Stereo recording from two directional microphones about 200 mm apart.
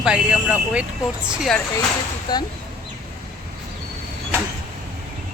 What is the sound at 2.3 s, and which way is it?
Speech, 20° left (ahead or behind).